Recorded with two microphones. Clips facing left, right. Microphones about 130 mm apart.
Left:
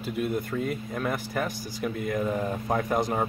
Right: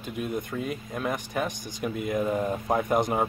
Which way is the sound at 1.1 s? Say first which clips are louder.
Right 2 dB; 15° right (ahead or behind).